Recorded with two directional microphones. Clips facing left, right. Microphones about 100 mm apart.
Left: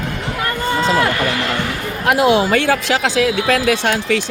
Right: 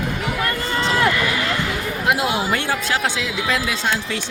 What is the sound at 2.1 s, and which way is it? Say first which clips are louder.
Speech: left 7 dB; 75° left (ahead or behind).